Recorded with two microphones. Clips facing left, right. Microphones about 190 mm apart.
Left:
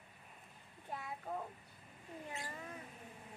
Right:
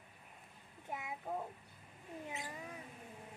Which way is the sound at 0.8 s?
20° right (ahead or behind).